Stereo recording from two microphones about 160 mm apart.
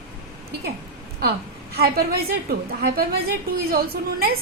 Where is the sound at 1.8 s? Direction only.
75° right (ahead or behind).